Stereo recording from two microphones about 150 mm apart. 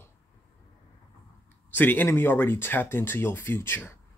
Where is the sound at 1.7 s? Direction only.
10° left (ahead or behind).